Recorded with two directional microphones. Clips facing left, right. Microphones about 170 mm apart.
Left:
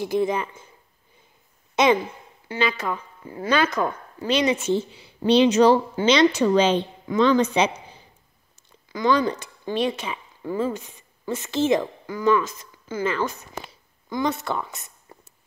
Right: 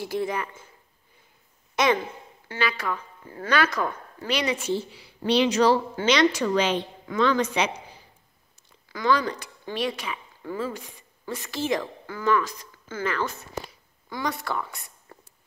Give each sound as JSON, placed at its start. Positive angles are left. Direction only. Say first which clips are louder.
{"t": 0.0, "sound": "speech", "louder": "left 5 dB", "side_deg": 20}
{"t": 2.4, "sound": "speech", "louder": "left 3 dB", "side_deg": 20}
{"t": 8.9, "sound": "speech", "louder": "left 3 dB", "side_deg": 20}